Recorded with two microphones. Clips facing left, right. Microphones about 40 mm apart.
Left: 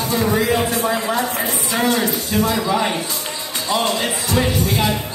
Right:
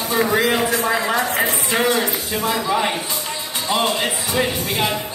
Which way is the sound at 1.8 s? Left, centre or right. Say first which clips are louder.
Left 1 dB; centre.